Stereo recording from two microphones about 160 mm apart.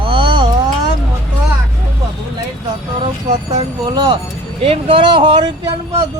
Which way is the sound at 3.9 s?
25° right (ahead or behind).